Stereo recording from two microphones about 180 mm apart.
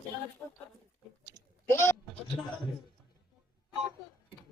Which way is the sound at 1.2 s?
15° left (ahead or behind).